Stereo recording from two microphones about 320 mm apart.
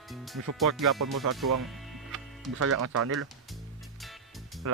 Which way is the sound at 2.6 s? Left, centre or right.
Right.